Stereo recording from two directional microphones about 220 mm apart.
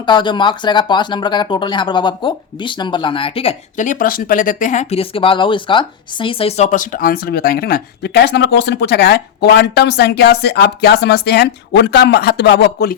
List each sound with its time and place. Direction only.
0.0 s speech: 20° left (ahead or behind); by 13.0 s 45° left (ahead or behind)